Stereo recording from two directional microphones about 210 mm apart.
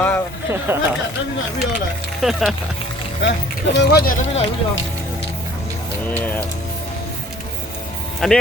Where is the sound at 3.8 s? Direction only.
45° left (ahead or behind).